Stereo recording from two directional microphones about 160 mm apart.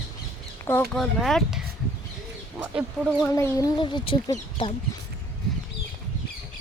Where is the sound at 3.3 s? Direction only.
20° left (ahead or behind).